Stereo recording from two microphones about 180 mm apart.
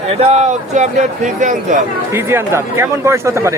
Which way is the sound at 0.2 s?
35° right (ahead or behind).